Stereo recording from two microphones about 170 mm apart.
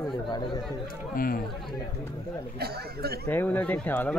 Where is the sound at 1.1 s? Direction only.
60° left (ahead or behind).